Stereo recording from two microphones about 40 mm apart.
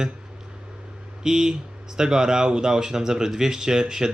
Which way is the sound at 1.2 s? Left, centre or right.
Centre.